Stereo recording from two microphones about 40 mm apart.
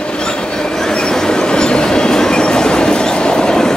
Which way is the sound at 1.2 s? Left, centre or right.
Centre.